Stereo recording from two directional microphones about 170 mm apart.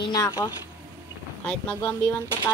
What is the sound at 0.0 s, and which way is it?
Speech, 25° left (ahead or behind).